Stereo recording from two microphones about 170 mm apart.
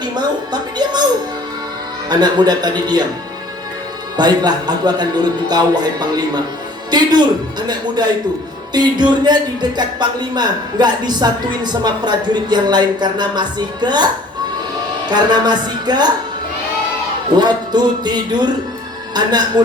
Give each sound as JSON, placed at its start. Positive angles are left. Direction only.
{"t": 0.0, "sound": "a sound", "side_deg": -25}
{"t": 2.0, "sound": "speech", "side_deg": -25}
{"t": 4.2, "sound": "speech", "side_deg": -25}
{"t": 15.1, "sound": "speech", "side_deg": -25}
{"t": 17.3, "sound": "speech", "side_deg": -25}